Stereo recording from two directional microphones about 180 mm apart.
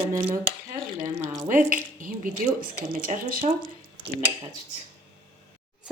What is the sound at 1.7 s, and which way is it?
Speech, 50° right (ahead or behind).